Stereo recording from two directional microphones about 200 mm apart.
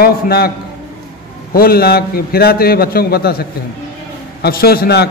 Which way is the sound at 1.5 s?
50° left (ahead or behind).